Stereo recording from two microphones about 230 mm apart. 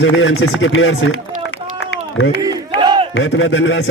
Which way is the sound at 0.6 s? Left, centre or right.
Left.